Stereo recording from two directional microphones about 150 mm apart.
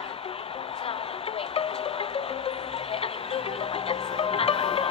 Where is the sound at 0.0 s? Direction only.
40° left (ahead or behind).